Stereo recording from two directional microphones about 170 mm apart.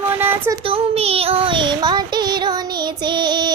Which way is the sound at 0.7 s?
35° right (ahead or behind).